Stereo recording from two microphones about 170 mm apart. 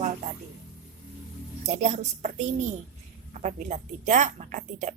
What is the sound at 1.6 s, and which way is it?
A woman's voice, 45° right (ahead or behind).